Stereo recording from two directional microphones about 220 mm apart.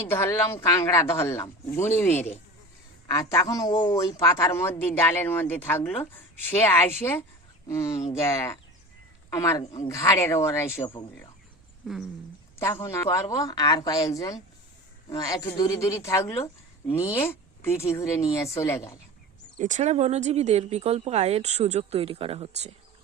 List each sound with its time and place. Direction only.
0.0 s speech: 10° left (ahead or behind)
2.1 s speech: 30° left (ahead or behind)
3.1 s speech: 15° left (ahead or behind)
8.2 s speech: 15° left (ahead or behind)
11.8 s speech: centre (ahead or behind)
12.5 s speech: 15° left (ahead or behind)
19.5 s speech: 35° right (ahead or behind)